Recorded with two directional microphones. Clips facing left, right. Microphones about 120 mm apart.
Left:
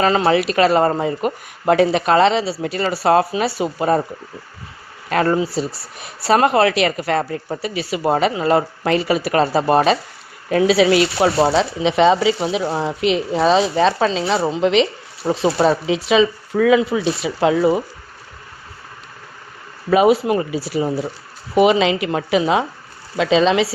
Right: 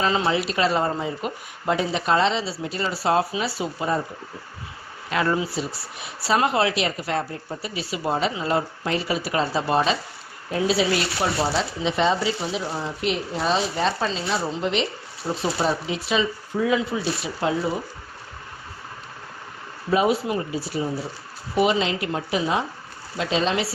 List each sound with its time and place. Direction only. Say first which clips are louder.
0.0 s speech: left 7 dB; 65° left (ahead or behind)
5.0 s speech: left 6 dB; 50° left (ahead or behind)
10.5 s speech: left 8 dB; 90° left
19.9 s speech: left 7 dB; 80° left